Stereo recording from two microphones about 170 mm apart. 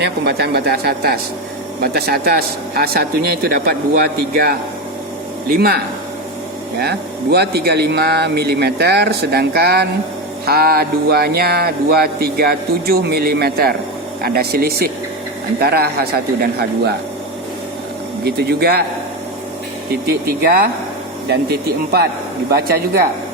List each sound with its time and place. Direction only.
0.0 s speech: 70° right (ahead or behind)
18.3 s speech: 70° right (ahead or behind)
20.1 s speech: 65° right (ahead or behind)